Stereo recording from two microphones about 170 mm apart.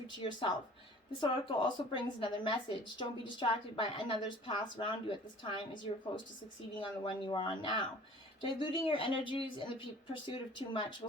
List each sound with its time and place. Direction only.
0.1 s speech: 30° left (ahead or behind)